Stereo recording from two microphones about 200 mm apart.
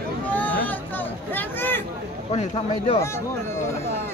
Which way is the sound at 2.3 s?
30° left (ahead or behind).